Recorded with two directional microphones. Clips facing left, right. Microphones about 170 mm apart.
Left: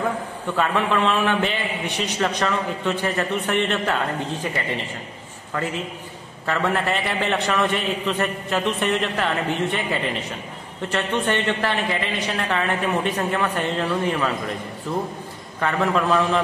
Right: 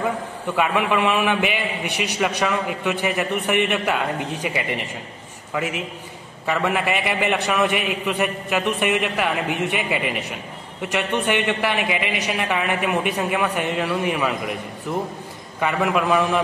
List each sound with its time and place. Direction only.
0.6 s a man's voice: 10° right (ahead or behind)